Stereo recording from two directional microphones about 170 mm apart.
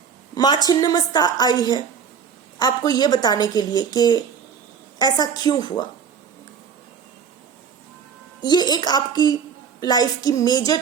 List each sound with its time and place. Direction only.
0.3 s a woman's voice: 25° left (ahead or behind)
8.4 s a woman's voice: 25° left (ahead or behind)